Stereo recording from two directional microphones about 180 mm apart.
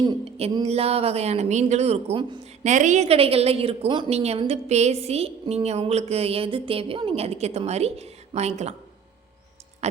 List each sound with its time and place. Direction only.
0.0 s a woman's voice: 30° right (ahead or behind)
2.6 s a woman's voice: 40° right (ahead or behind)
9.8 s speech: 40° right (ahead or behind)